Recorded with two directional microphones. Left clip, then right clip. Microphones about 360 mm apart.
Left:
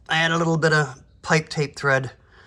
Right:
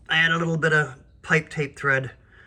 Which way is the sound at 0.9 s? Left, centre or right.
Centre.